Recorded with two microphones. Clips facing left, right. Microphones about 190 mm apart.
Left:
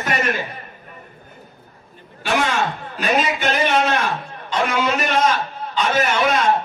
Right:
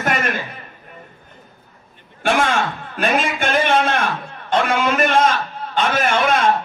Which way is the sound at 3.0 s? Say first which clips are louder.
Right 1 dB; 50° right (ahead or behind).